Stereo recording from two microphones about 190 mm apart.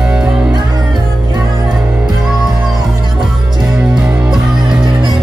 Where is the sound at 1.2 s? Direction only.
20° right (ahead or behind).